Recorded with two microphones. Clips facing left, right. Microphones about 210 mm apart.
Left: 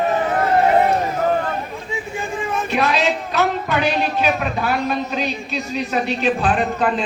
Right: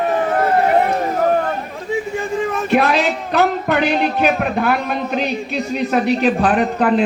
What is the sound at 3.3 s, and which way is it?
A woman's voice, 55° right (ahead or behind).